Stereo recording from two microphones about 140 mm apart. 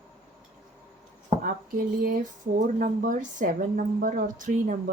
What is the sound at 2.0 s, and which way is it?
A woman's voice, 65° right (ahead or behind).